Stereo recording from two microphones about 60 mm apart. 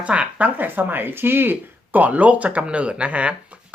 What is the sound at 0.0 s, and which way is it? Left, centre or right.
Speech, right.